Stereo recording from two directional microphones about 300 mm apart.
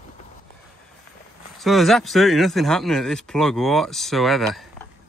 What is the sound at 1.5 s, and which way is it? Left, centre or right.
Speech, centre.